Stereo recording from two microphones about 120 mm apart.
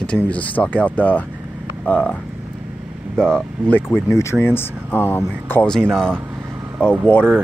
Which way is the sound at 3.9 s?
25° left (ahead or behind).